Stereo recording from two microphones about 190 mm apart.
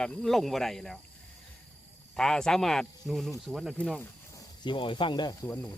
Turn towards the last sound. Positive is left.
turn(degrees=20)  # may be behind; listen again after turning